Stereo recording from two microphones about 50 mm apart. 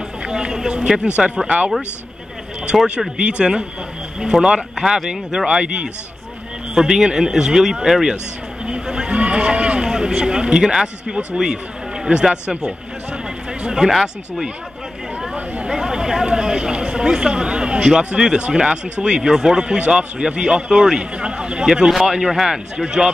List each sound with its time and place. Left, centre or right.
0.3 s speech: centre
2.7 s speech: centre
3.2 s speech: centre
15.6 s speech: centre
21.6 s speech: centre